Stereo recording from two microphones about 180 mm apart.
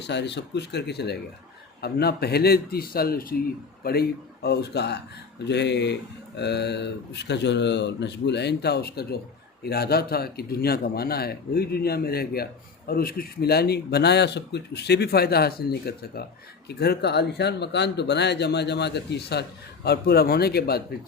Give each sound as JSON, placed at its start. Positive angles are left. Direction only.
{"t": 0.0, "sound": "speech", "side_deg": 75}